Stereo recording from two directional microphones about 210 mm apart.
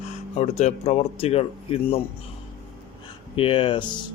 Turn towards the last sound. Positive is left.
turn(degrees=25)  # may be behind; listen again after turning